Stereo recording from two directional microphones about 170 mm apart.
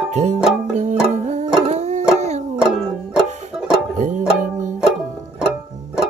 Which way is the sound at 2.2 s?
40° right (ahead or behind).